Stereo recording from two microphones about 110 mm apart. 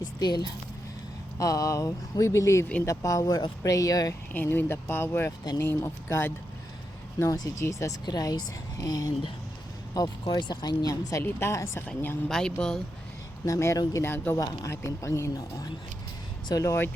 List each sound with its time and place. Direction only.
0.0 s speech: 40° left (ahead or behind)
4.3 s speech: 20° left (ahead or behind)
7.3 s speech: 35° left (ahead or behind)
8.0 s speech: 40° left (ahead or behind)
11.2 s speech: 20° left (ahead or behind)
11.9 s speech: 5° left (ahead or behind)
13.4 s speech: 25° left (ahead or behind)
14.0 s speech: 20° left (ahead or behind)
14.3 s speech: 30° left (ahead or behind)
16.5 s speech: 30° left (ahead or behind)